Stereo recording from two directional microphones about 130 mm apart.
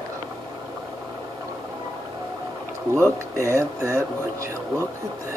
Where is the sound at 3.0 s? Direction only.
20° right (ahead or behind).